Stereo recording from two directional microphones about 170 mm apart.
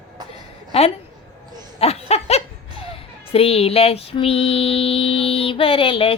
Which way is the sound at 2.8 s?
35° left (ahead or behind).